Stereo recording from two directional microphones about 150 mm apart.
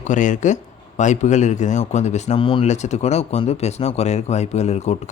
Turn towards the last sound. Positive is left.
turn(degrees=50)  # may be behind; listen again after turning